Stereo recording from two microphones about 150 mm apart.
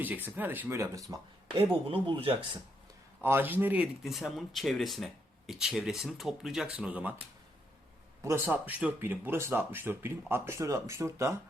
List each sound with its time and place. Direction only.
0.0 s speech: 10° right (ahead or behind)
1.5 s speech: 35° right (ahead or behind)
3.2 s speech: 15° right (ahead or behind)
4.0 s speech: centre (ahead or behind)
8.2 s speech: 15° right (ahead or behind)